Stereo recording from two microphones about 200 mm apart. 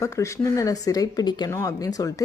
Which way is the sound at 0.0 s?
15° left (ahead or behind).